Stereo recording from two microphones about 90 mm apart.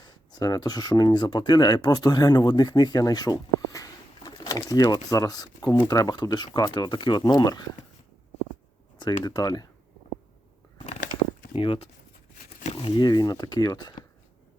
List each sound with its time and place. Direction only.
0.0 s speech: 50° left (ahead or behind)
4.3 s pigeon: 50° left (ahead or behind)
4.7 s speech: 40° left (ahead or behind)
9.0 s speech: 50° left (ahead or behind)
11.5 s speech: 80° left
13.0 s speech: 50° left (ahead or behind)